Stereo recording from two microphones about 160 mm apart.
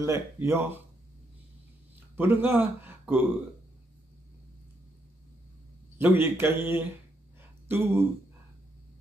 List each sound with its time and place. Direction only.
0.0 s speech: 15° right (ahead or behind)
2.1 s a man's voice: 15° right (ahead or behind)
5.9 s speech: 10° right (ahead or behind)
7.6 s a sound: 15° right (ahead or behind)